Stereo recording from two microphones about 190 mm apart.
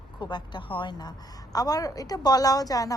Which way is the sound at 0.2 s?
25° left (ahead or behind).